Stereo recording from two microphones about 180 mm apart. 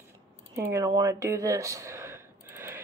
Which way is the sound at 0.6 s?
15° right (ahead or behind).